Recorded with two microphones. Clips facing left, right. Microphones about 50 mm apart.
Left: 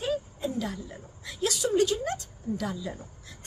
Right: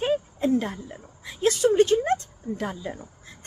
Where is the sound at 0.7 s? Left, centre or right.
Right.